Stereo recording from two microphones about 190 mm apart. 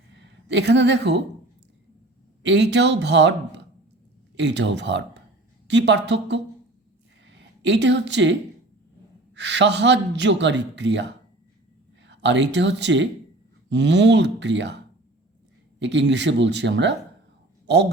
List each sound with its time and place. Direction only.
0.1 s a woman's voice: 65° right (ahead or behind)
2.4 s speech: 70° right (ahead or behind)
4.4 s speech: 65° right (ahead or behind)
12.0 s speech: 70° right (ahead or behind)
15.8 s speech: 70° right (ahead or behind)